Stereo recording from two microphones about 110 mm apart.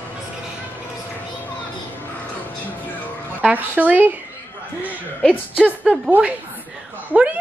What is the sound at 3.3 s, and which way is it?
Speech, 15° right (ahead or behind).